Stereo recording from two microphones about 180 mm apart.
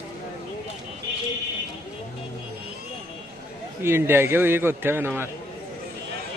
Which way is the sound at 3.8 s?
15° right (ahead or behind).